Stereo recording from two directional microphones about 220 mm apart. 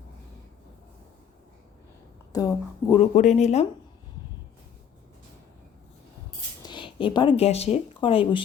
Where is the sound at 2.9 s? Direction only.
30° left (ahead or behind).